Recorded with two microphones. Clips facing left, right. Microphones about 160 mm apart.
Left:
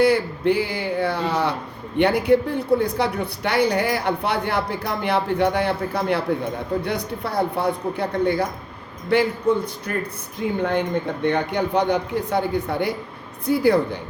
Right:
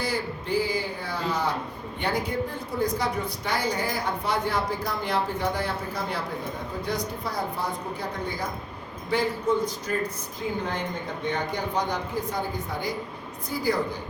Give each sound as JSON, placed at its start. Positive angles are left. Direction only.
{"t": 0.0, "sound": "speech", "side_deg": 65}